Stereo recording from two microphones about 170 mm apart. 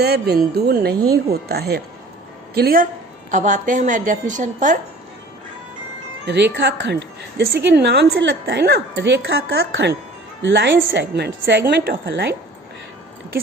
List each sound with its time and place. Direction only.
0.0 s speech: 70° right (ahead or behind)
3.3 s a woman's voice: 50° right (ahead or behind)
6.2 s a woman's voice: 85° right